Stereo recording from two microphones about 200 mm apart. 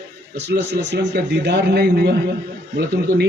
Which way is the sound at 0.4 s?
60° right (ahead or behind).